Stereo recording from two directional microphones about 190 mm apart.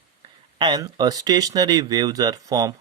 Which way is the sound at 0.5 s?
25° right (ahead or behind).